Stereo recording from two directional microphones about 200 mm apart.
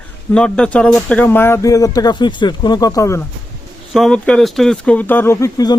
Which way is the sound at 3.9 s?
Centre (ahead or behind).